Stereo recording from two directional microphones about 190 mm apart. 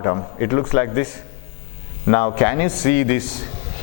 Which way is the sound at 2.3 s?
20° left (ahead or behind).